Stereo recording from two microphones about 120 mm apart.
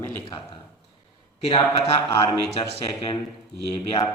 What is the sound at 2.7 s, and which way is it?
Speech, 50° left (ahead or behind).